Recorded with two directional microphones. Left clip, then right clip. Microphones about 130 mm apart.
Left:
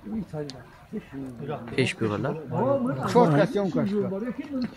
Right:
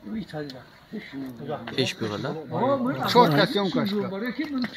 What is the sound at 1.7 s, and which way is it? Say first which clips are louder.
Speech: left 2 dB; 15° left (ahead or behind).